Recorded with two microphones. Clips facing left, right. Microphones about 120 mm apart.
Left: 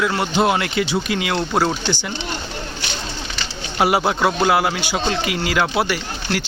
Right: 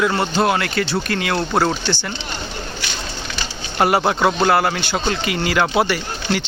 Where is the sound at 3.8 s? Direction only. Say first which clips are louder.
Right 1 dB; 5° left (ahead or behind).